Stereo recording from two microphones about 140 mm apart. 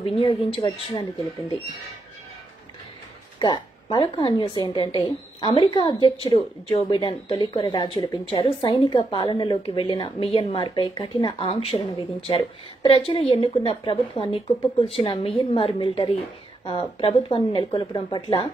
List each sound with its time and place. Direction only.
0.0 s speech: 40° left (ahead or behind)
3.3 s speech: 30° left (ahead or behind)